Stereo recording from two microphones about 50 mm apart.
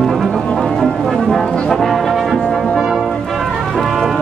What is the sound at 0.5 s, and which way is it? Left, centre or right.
Brass instrument, centre.